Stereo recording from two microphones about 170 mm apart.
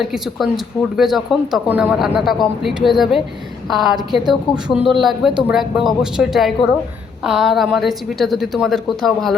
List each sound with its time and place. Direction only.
0.0 s speech: centre (ahead or behind)